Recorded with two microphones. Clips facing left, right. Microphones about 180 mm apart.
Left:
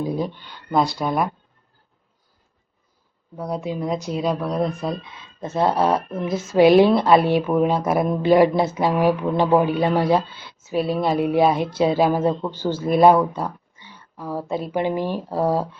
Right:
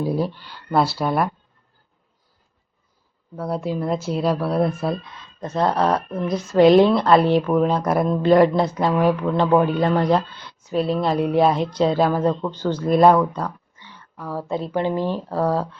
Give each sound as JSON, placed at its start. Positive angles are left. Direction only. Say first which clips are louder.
{"t": 0.0, "sound": "speech", "louder": "right 2 dB", "side_deg": -5}
{"t": 3.3, "sound": "speech", "louder": "right 2 dB", "side_deg": 0}
{"t": 5.4, "sound": "speech", "louder": "even", "side_deg": 5}